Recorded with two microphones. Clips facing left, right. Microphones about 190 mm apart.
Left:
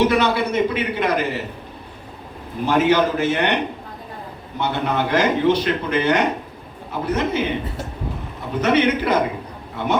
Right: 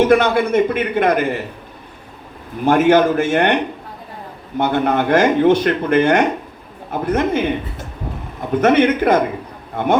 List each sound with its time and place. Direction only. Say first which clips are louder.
0.1 s speech: right 5 dB; 50° right (ahead or behind)
2.6 s speech: right 5 dB; 50° right (ahead or behind)
8.6 s speech: right 4 dB; 50° right (ahead or behind)